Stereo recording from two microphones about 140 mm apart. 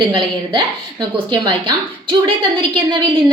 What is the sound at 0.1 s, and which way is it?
A woman's voice, 35° right (ahead or behind).